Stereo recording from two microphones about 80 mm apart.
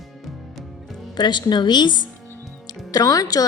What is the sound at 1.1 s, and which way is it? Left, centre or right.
Speech, left.